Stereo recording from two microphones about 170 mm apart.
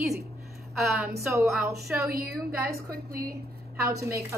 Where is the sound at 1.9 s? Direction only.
5° right (ahead or behind).